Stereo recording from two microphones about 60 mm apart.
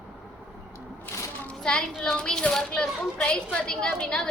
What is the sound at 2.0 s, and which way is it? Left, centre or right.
A woman's voice, centre.